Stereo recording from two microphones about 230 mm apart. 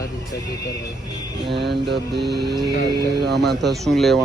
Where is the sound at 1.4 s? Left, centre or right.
Right.